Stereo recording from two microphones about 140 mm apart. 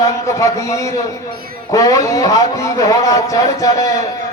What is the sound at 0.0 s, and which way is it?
Speech, 20° left (ahead or behind).